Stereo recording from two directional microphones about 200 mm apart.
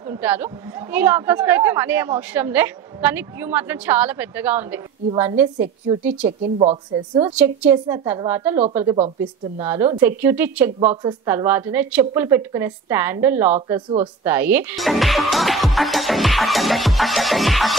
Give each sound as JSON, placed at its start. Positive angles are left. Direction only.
{"t": 0.0, "sound": "a woman's voice", "side_deg": -10}
{"t": 6.6, "sound": "a woman's voice", "side_deg": -30}
{"t": 7.3, "sound": "a woman's voice", "side_deg": -5}
{"t": 7.7, "sound": "a woman's voice", "side_deg": -15}
{"t": 8.9, "sound": "speech", "side_deg": -30}
{"t": 9.6, "sound": "a woman's voice", "side_deg": -15}
{"t": 13.7, "sound": "a woman's voice", "side_deg": -20}
{"t": 14.2, "sound": "speech", "side_deg": -10}